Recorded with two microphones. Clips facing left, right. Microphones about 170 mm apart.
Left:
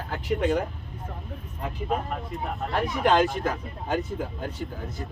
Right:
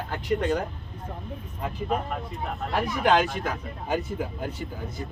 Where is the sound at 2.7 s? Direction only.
Centre (ahead or behind).